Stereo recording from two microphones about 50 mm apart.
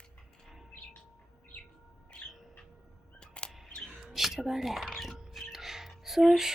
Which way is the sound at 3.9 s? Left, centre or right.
Centre.